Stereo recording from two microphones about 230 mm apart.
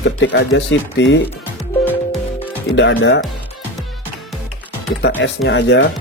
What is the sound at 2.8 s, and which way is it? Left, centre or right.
Speech, left.